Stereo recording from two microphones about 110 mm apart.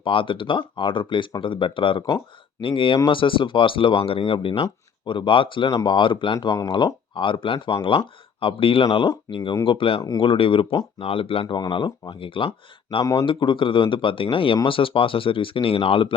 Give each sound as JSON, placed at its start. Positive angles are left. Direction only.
{"t": 0.0, "sound": "speech", "side_deg": 50}